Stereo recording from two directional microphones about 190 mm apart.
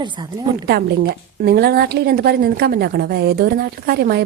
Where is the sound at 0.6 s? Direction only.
55° right (ahead or behind).